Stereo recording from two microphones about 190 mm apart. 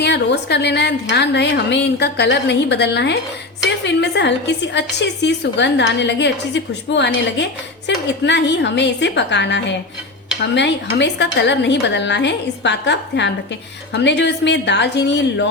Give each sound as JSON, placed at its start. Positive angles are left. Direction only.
{"t": 0.0, "sound": "a woman's voice", "side_deg": 65}